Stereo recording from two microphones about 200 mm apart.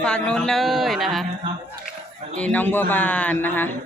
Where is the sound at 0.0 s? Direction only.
5° left (ahead or behind).